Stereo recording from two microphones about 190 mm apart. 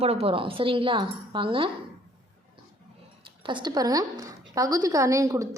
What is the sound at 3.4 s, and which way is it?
A woman's voice, 25° right (ahead or behind).